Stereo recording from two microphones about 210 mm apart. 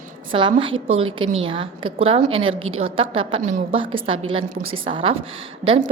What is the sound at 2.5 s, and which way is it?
Speech, 80° right.